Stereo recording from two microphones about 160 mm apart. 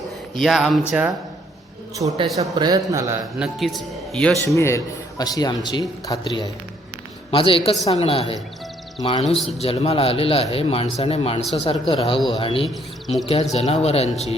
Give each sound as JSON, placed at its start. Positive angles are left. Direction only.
{"t": 0.4, "sound": "a man's voice", "side_deg": 0}
{"t": 2.0, "sound": "a man's voice", "side_deg": -30}
{"t": 3.3, "sound": "a man's voice", "side_deg": -5}
{"t": 4.5, "sound": "a man's voice", "side_deg": 20}
{"t": 9.2, "sound": "a man's voice", "side_deg": 0}
{"t": 9.6, "sound": "speech", "side_deg": 40}
{"t": 12.6, "sound": "speech", "side_deg": 0}
{"t": 13.2, "sound": "speech", "side_deg": 40}